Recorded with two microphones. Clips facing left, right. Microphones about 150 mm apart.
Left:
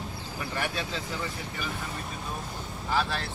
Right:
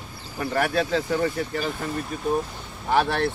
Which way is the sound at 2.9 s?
65° right (ahead or behind).